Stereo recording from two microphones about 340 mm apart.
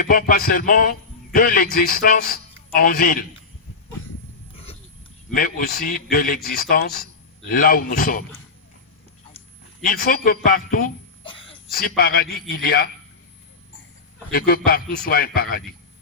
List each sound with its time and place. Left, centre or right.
0.0 s a man's voice: left
4.5 s roaring cats: centre
5.3 s a man's voice: left
9.8 s a man's voice: left
11.7 s a man's voice: left
14.3 s a man's voice: left